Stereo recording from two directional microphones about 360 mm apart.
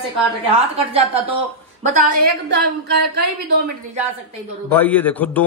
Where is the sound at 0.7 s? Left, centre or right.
Centre.